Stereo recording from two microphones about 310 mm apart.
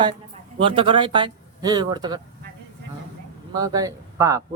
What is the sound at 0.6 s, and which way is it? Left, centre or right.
Speech, centre.